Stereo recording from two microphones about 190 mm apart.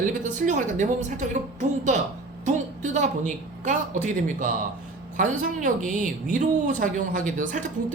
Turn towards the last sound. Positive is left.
turn(degrees=-40)  # may be behind; listen again after turning